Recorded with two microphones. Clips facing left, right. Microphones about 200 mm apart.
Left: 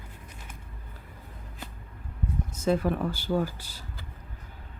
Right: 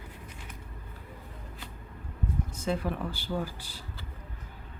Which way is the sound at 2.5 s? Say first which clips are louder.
Left 7 dB; 40° left (ahead or behind).